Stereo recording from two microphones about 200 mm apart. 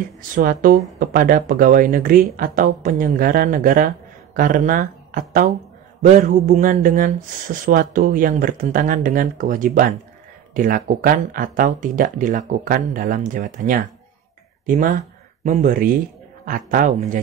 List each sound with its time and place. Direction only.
0.3 s speech: 45° right (ahead or behind)
15.4 s speech: 40° right (ahead or behind)